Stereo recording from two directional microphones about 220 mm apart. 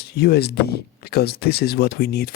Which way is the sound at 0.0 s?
45° left (ahead or behind).